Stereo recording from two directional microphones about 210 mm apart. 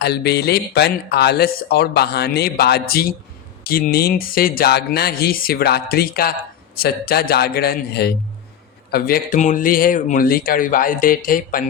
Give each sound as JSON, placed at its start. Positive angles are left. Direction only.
{"t": 0.0, "sound": "speech", "side_deg": 50}